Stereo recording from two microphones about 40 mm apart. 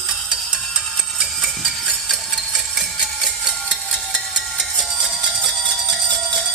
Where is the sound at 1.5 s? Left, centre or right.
Centre.